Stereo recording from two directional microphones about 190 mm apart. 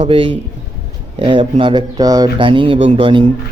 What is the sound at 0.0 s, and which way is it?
Speech, 30° right (ahead or behind).